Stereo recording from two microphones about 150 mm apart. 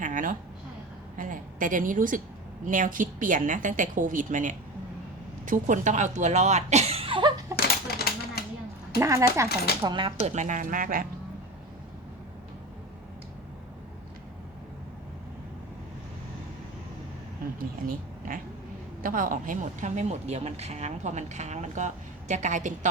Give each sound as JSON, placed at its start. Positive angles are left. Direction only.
{"t": 0.0, "sound": "a sound", "side_deg": -60}
{"t": 1.1, "sound": "a woman's voice", "side_deg": -60}
{"t": 7.5, "sound": "a sound", "side_deg": 90}
{"t": 9.0, "sound": "speech", "side_deg": -20}
{"t": 9.8, "sound": "speech", "side_deg": -30}
{"t": 10.2, "sound": "a woman's voice", "side_deg": -50}
{"t": 19.0, "sound": "speech", "side_deg": -65}